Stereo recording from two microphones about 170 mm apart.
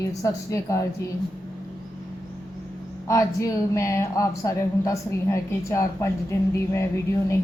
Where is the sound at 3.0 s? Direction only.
20° left (ahead or behind).